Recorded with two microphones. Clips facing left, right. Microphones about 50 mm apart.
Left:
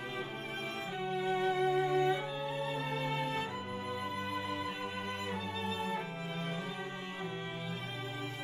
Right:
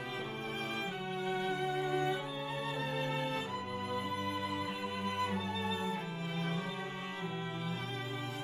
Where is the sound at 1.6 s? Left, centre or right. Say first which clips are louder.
Left 5 dB; left.